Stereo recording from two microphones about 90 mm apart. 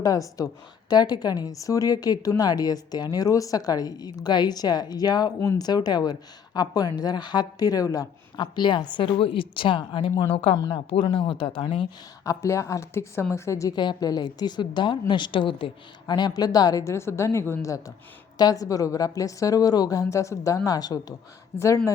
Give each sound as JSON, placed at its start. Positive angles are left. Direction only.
{"t": 0.0, "sound": "a woman's voice", "side_deg": 40}
{"t": 8.4, "sound": "a woman's voice", "side_deg": 60}
{"t": 11.1, "sound": "a woman's voice", "side_deg": 75}
{"t": 12.2, "sound": "speech", "side_deg": 35}
{"t": 13.7, "sound": "a woman's voice", "side_deg": 50}
{"t": 16.1, "sound": "a woman's voice", "side_deg": 50}
{"t": 16.8, "sound": "speech", "side_deg": 30}